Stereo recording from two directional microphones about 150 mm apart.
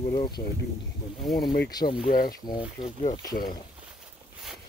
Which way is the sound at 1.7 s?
25° left (ahead or behind).